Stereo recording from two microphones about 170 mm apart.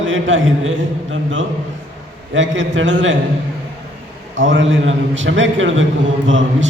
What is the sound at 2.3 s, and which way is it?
Speech, 90° right.